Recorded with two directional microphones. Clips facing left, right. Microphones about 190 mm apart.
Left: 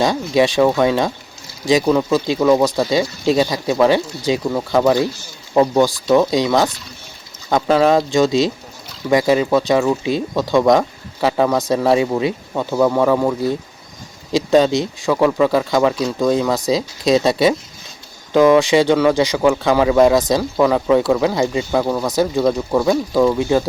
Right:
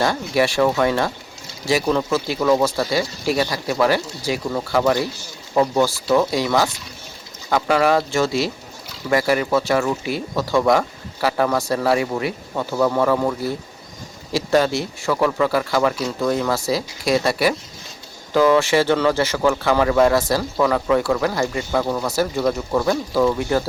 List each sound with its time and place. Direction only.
0.0 s speech: 20° left (ahead or behind)